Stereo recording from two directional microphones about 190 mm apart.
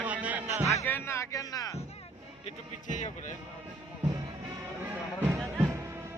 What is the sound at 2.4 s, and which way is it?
Speech, 40° left (ahead or behind).